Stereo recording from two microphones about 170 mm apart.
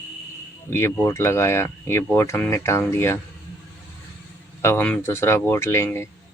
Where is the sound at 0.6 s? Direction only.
15° left (ahead or behind).